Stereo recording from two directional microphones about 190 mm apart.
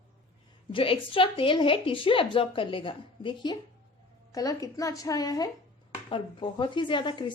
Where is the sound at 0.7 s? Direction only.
30° left (ahead or behind).